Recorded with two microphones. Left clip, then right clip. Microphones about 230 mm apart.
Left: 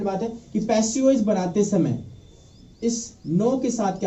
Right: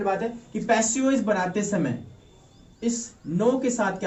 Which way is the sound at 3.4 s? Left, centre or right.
Centre.